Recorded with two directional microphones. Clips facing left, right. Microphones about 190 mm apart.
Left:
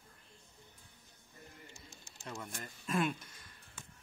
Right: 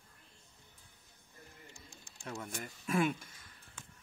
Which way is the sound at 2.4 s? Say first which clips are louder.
Right 3 dB; 10° right (ahead or behind).